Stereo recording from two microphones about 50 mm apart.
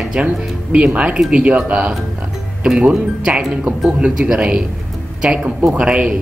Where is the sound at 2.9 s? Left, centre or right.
Centre.